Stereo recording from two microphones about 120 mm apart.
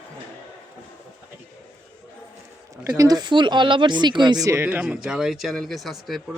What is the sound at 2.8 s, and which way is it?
Speech, 30° right (ahead or behind).